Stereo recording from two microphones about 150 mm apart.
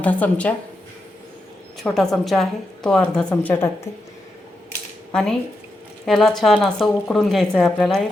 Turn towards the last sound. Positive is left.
turn(degrees=0)  # may be behind; listen again after turning